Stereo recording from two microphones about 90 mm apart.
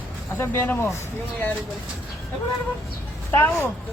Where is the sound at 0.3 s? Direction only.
25° left (ahead or behind).